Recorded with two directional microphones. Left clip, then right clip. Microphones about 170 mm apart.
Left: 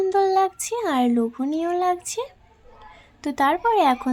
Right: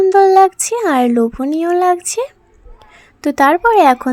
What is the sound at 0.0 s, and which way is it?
Speech, 40° right (ahead or behind).